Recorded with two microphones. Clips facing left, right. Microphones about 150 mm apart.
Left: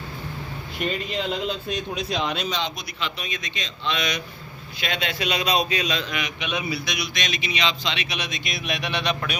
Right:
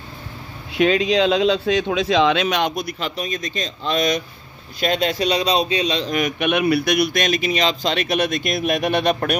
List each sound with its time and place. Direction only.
0.7 s a man's voice: 90° right; by 9.4 s 50° right (ahead or behind)